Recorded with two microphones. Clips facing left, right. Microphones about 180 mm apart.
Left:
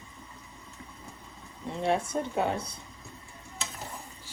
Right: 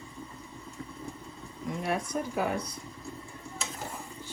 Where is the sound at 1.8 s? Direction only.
30° left (ahead or behind).